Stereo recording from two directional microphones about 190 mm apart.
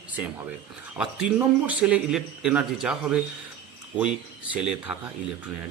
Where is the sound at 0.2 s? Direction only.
10° right (ahead or behind).